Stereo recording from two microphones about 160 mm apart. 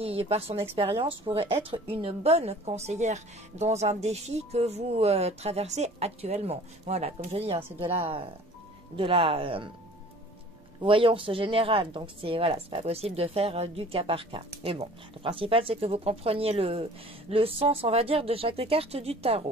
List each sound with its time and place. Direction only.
0.0 s speech: 35° right (ahead or behind)
10.8 s speech: 35° right (ahead or behind)